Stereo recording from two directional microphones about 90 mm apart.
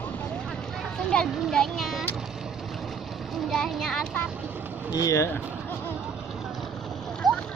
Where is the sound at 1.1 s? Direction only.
5° left (ahead or behind).